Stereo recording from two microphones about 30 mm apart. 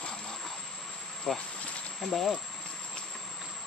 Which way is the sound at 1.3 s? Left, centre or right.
Centre.